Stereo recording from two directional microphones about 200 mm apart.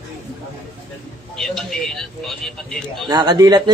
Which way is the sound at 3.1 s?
20° right (ahead or behind).